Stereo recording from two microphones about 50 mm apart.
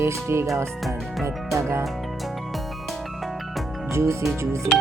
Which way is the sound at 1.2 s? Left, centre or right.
Right.